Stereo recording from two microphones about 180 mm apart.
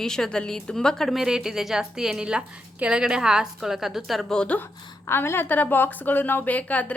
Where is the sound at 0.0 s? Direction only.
5° left (ahead or behind).